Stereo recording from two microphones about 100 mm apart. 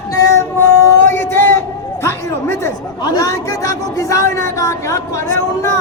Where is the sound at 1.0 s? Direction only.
25° left (ahead or behind).